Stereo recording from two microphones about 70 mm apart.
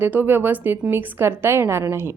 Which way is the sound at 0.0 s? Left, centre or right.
Right.